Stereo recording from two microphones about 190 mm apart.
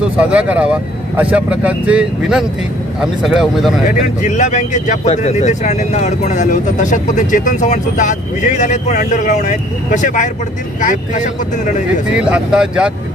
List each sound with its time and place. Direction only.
0.2 s speech: 5° right (ahead or behind)
4.0 s speech: 40° left (ahead or behind)
12.3 s speech: 5° right (ahead or behind)